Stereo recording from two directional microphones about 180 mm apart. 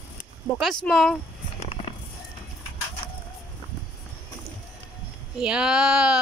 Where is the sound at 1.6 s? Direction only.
30° left (ahead or behind).